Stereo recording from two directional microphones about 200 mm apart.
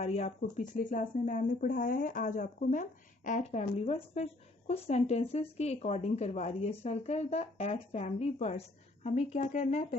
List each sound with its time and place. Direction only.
0.0 s speech: 30° left (ahead or behind)